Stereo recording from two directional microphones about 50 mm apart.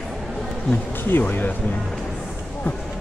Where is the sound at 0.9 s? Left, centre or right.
Left.